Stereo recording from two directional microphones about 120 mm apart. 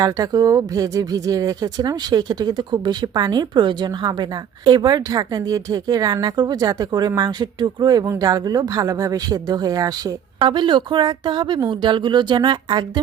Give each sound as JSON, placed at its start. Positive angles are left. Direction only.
{"t": 0.0, "sound": "speech", "side_deg": -30}
{"t": 10.4, "sound": "speech", "side_deg": -40}